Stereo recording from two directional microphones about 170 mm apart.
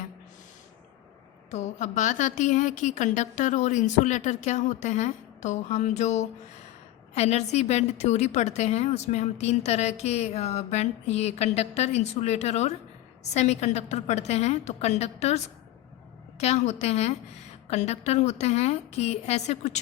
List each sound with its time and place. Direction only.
1.5 s a woman's voice: 45° left (ahead or behind)
16.4 s a woman's voice: 40° left (ahead or behind)